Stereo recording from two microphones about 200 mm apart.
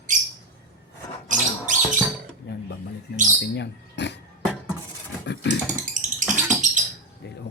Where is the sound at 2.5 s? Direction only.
55° left (ahead or behind).